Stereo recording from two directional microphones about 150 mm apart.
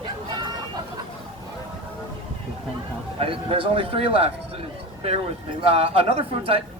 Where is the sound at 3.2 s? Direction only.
40° right (ahead or behind).